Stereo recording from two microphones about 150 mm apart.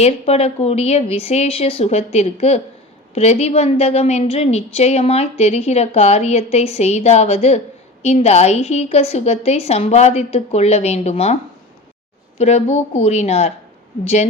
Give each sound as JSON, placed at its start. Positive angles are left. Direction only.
{"t": 0.0, "sound": "a woman's voice", "side_deg": 45}
{"t": 12.4, "sound": "a woman's voice", "side_deg": 45}